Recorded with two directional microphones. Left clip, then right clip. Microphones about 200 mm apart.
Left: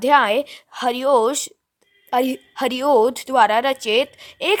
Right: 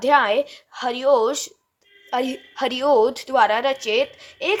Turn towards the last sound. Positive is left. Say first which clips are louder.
# left 3 dB
turn(degrees=50)  # may be behind; listen again after turning